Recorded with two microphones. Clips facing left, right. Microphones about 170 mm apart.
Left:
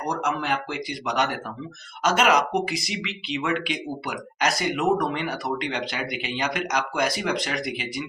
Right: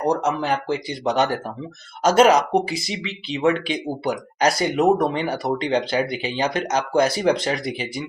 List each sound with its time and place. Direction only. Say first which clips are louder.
0.1 s speech: right 3 dB; 35° right (ahead or behind)